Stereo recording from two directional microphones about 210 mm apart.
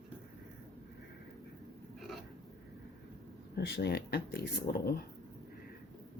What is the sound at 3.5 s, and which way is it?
Speech, 50° left (ahead or behind).